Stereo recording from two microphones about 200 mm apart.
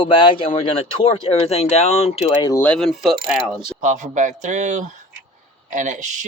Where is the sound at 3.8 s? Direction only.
35° right (ahead or behind).